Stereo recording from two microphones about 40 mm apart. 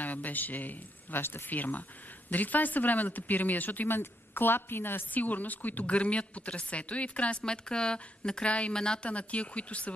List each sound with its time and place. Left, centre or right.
0.0 s speech: left
3.9 s a woman's voice: left
5.1 s speech: left
5.9 s speech: left
7.4 s speech: left